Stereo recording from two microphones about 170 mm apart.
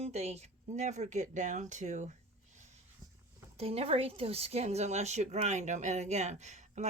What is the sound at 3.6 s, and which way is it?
A woman's voice, 35° right (ahead or behind).